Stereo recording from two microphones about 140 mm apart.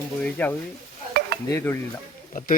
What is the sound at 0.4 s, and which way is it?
Speech, 10° left (ahead or behind).